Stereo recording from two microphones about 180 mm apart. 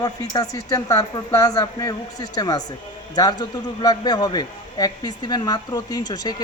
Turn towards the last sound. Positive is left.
turn(degrees=20)  # may be behind; listen again after turning